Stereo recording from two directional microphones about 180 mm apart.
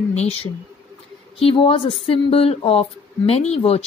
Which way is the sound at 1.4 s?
30° left (ahead or behind).